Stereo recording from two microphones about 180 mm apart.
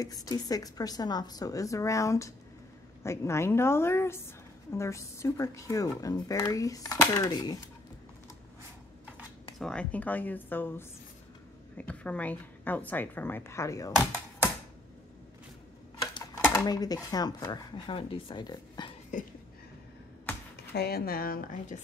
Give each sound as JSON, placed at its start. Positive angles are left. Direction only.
{"t": 0.0, "sound": "a woman's voice", "side_deg": 20}
{"t": 9.6, "sound": "a woman's voice", "side_deg": 5}
{"t": 16.0, "sound": "speech", "side_deg": 20}
{"t": 20.7, "sound": "a woman's voice", "side_deg": 60}